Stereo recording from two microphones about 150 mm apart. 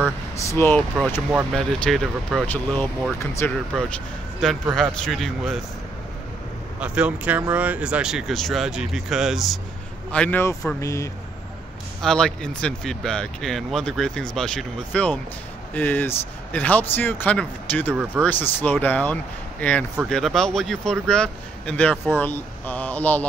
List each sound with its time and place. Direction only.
0.4 s speech: 15° left (ahead or behind)
1.5 s speech: 5° left (ahead or behind)
6.8 s speech: 10° right (ahead or behind)
10.1 s speech: 10° left (ahead or behind)
12.0 s speech: 5° left (ahead or behind)